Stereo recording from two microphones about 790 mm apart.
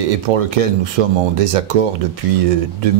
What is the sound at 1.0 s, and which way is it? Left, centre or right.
Speech, right.